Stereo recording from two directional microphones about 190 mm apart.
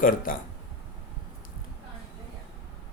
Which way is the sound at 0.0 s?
45° left (ahead or behind).